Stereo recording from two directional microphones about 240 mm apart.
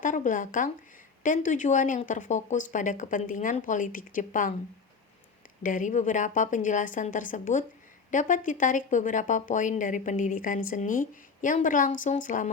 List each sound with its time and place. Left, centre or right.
0.0 s speech: left
5.6 s speech: left